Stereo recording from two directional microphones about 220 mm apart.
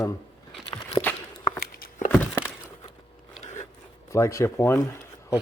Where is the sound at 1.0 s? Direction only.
20° left (ahead or behind).